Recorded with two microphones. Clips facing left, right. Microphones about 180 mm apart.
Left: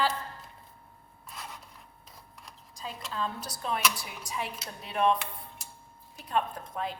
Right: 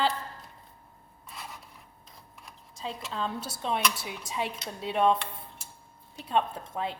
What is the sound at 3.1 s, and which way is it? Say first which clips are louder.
A woman's voice: even; 30° right (ahead or behind).